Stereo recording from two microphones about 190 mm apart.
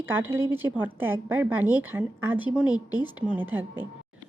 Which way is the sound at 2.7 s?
20° left (ahead or behind).